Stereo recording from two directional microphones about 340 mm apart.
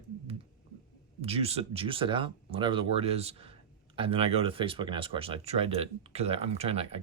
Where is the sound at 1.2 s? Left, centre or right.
Centre.